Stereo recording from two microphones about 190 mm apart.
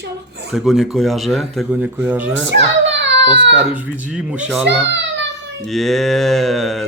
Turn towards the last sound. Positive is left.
turn(degrees=0)  # may be behind; listen again after turning